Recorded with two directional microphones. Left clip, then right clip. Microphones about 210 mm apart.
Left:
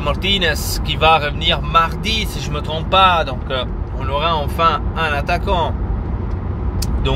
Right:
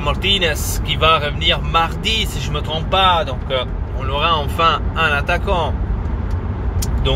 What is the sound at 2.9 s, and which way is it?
Speech, 20° left (ahead or behind).